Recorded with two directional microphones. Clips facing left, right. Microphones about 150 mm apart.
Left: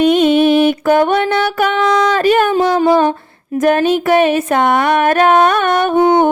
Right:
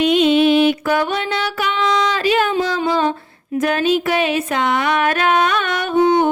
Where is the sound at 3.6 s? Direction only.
50° left (ahead or behind).